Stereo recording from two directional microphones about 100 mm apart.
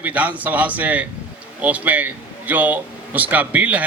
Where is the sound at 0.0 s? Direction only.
15° right (ahead or behind).